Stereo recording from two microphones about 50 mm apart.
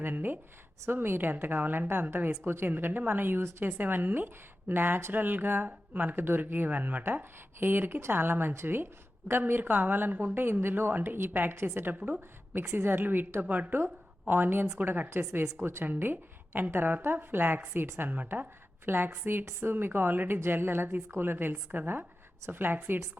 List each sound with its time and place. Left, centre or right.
0.0 s a woman's voice: right
13.4 s a woman's voice: right
13.7 s a woman's voice: right
15.1 s speech: right
15.8 s a woman's voice: right